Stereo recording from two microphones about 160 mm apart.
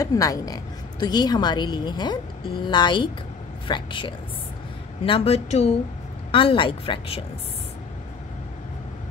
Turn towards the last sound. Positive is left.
turn(degrees=35)  # may be behind; listen again after turning